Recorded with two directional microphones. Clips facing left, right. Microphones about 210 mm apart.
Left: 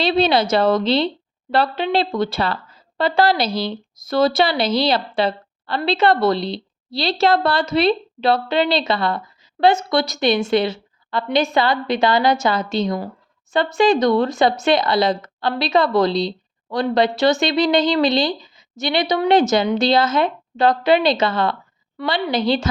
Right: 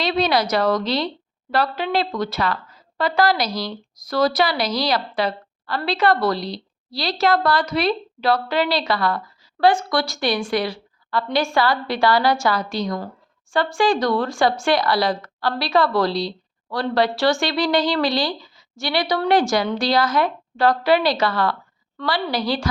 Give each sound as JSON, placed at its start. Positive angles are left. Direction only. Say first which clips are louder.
{"t": 0.0, "sound": "a woman's voice", "louder": "left 3 dB", "side_deg": 30}